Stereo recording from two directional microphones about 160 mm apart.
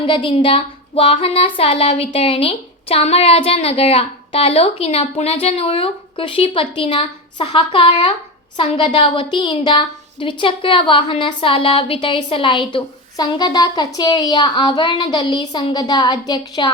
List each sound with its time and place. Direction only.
0.0 s a woman's voice: 30° left (ahead or behind)